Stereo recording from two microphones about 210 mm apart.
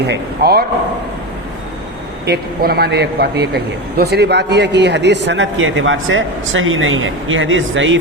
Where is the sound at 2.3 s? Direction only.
50° right (ahead or behind).